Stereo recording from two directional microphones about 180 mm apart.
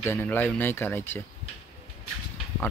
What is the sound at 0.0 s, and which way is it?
Speech, 10° left (ahead or behind).